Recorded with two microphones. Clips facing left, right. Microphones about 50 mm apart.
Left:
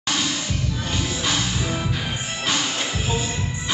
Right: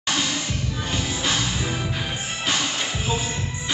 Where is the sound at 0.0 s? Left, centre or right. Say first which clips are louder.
Even; centre.